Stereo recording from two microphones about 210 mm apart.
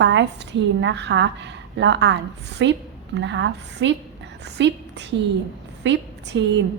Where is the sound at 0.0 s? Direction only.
60° right (ahead or behind).